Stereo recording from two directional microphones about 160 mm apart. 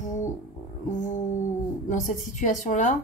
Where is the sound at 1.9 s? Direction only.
50° left (ahead or behind).